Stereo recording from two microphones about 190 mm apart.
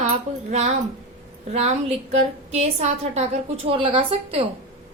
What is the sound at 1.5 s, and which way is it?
A woman's voice, 35° right (ahead or behind).